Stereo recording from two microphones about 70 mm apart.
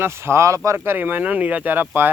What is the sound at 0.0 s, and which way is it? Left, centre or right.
Speech, right.